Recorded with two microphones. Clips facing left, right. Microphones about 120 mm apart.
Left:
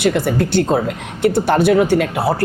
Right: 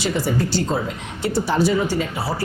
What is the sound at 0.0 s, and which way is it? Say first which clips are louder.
Speech: left 5 dB; 60° left (ahead or behind).